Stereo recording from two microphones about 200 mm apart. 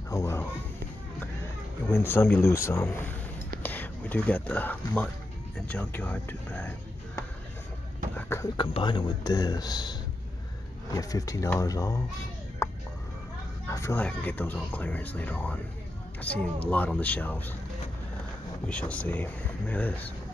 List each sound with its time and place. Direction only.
0.1 s a sound: 15° left (ahead or behind)
1.9 s speech: 10° left (ahead or behind)
8.2 s a sound: 10° left (ahead or behind)
8.5 s speech: 25° left (ahead or behind)
12.6 s music: 15° left (ahead or behind)
13.7 s speech: 15° left (ahead or behind)
18.7 s speech: 5° left (ahead or behind)